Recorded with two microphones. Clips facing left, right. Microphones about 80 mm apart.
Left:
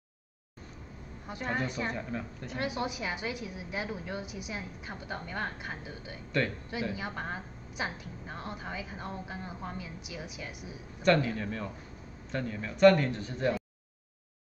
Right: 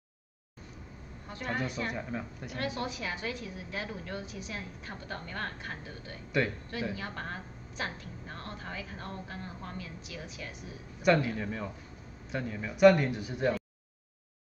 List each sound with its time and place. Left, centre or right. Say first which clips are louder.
1.2 s a woman's voice: left 2 dB; centre
1.9 s a man's voice: left 1 dB; centre
2.5 s a woman's voice: left 2 dB; centre
6.3 s a man's voice: right 1 dB; centre
6.7 s a woman's voice: left 1 dB; centre
11.0 s a man's voice: even; centre